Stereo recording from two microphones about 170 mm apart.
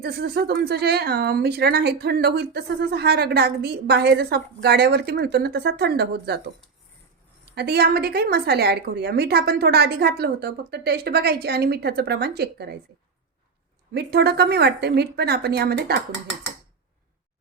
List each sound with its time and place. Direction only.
0.0 s speech: 70° right (ahead or behind)
7.5 s speech: 70° right (ahead or behind)
13.9 s speech: 75° right (ahead or behind)